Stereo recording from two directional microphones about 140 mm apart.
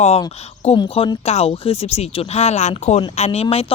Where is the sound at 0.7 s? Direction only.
40° left (ahead or behind).